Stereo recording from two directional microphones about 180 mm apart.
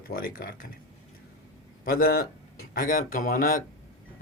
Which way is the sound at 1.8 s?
55° left (ahead or behind).